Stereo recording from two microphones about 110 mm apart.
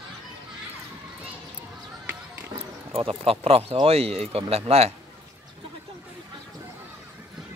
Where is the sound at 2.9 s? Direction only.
60° right (ahead or behind).